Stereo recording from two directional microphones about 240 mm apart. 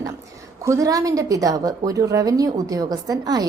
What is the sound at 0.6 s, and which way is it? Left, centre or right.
A woman's voice, centre.